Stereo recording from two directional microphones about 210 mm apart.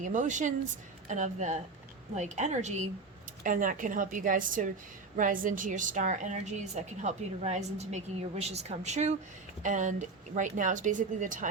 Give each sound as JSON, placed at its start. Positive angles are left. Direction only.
{"t": 0.0, "sound": "a woman's voice", "side_deg": -35}